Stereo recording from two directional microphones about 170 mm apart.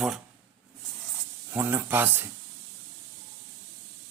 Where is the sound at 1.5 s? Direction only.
15° right (ahead or behind).